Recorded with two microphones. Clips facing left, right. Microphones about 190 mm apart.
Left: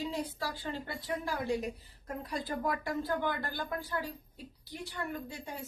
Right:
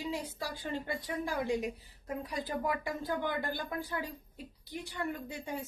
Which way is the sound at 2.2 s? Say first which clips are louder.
Left 1 dB; 15° right (ahead or behind).